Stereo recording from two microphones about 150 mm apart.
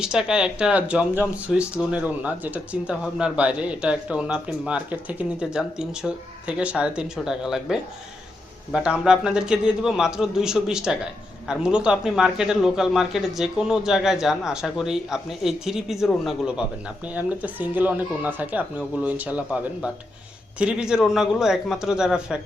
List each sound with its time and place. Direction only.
0.0 s a man's voice: 5° right (ahead or behind)